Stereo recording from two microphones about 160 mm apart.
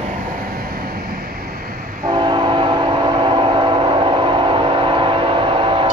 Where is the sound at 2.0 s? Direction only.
30° right (ahead or behind).